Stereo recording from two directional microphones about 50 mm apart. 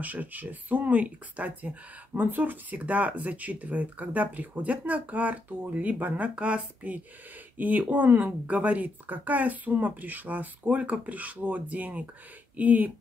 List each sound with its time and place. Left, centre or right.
0.0 s speech: right